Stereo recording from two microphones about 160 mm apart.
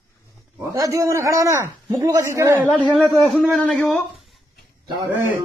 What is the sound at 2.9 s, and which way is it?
Speech, centre (ahead or behind).